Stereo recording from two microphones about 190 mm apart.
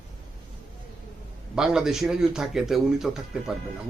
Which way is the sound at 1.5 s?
5° right (ahead or behind).